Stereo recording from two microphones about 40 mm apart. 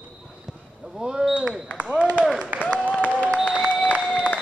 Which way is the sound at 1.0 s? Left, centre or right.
Centre.